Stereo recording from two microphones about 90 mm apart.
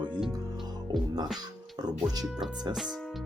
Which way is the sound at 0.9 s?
5° right (ahead or behind).